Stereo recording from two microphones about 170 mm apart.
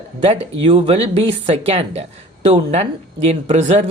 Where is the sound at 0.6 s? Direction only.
35° right (ahead or behind).